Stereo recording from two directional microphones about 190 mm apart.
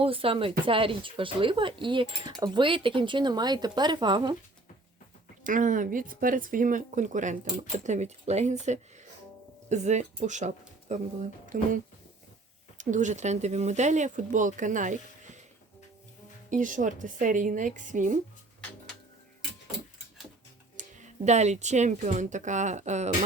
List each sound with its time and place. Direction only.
0.0 s speech: 30° right (ahead or behind)
5.4 s speech: 45° right (ahead or behind)
16.5 s speech: 40° right (ahead or behind)
20.7 s speech: 40° right (ahead or behind)